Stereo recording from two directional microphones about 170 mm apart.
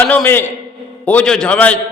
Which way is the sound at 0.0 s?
10° left (ahead or behind).